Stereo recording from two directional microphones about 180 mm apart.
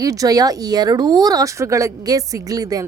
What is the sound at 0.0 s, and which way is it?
Speech, 20° right (ahead or behind).